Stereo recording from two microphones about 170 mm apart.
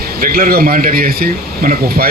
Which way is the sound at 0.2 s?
60° right (ahead or behind).